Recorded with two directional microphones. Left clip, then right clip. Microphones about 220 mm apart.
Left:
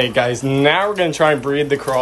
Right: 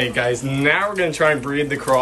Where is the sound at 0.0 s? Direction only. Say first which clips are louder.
Left 3 dB; 15° left (ahead or behind).